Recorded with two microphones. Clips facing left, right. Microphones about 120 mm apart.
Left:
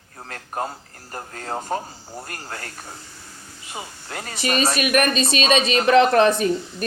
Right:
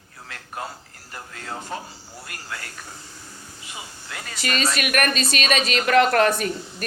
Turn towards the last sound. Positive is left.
turn(degrees=20)  # may be behind; listen again after turning